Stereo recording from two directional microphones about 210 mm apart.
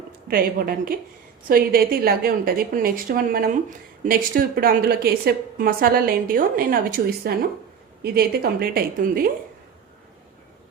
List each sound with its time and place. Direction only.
0.3 s a woman's voice: 45° right (ahead or behind)